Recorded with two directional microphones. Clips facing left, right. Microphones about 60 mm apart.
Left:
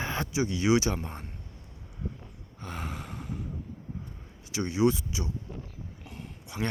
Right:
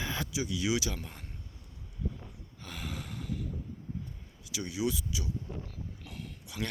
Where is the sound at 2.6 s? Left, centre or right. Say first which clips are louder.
Left 4 dB; left.